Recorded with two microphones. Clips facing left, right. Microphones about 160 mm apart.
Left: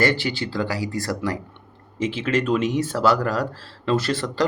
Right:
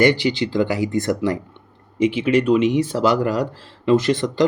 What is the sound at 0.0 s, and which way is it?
Speech, 15° right (ahead or behind).